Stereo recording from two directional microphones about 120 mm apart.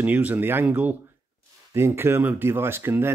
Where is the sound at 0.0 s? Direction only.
15° right (ahead or behind).